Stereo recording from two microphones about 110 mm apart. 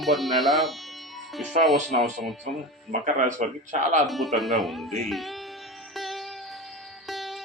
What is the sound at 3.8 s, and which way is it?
Speech, 90° right.